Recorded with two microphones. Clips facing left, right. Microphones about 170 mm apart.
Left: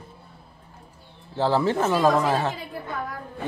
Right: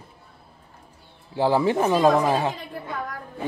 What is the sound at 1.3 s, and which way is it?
A man's voice, 15° right (ahead or behind).